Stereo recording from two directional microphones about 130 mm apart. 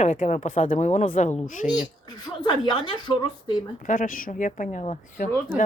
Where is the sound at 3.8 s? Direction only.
90° left.